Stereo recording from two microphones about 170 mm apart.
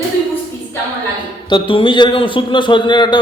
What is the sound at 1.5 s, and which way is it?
A man's voice, 30° left (ahead or behind).